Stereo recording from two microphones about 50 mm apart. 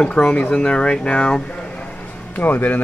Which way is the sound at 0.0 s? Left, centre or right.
Left.